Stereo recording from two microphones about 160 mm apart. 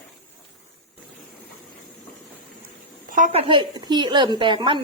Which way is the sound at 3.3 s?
35° right (ahead or behind).